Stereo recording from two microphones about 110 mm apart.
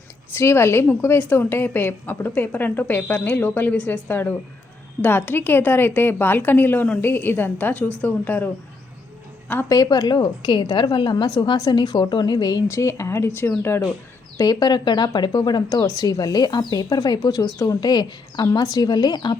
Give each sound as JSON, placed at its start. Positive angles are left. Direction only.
{"t": 0.3, "sound": "a woman's voice", "side_deg": 25}
{"t": 9.6, "sound": "speech", "side_deg": 35}
{"t": 12.6, "sound": "speech", "side_deg": 25}
{"t": 14.3, "sound": "speech", "side_deg": 35}